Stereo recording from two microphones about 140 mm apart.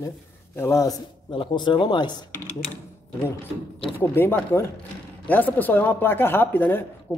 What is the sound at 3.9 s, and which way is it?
Speech, 15° left (ahead or behind).